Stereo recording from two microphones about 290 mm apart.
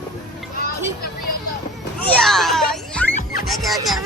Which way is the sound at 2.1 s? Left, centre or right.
Centre.